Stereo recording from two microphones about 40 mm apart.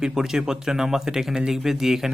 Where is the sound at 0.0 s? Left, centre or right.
Centre.